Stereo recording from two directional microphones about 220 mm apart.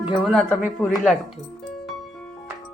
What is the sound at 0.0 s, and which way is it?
Speech, centre (ahead or behind).